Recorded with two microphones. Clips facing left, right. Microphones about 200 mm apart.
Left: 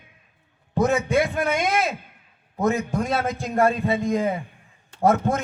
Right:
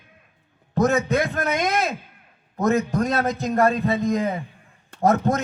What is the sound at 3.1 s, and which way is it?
Speech, 40° right (ahead or behind).